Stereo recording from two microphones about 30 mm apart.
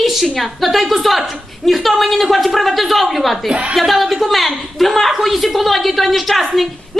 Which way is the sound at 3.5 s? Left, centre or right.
Right.